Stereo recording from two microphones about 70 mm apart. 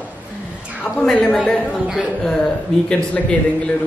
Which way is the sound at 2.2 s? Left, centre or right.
Centre.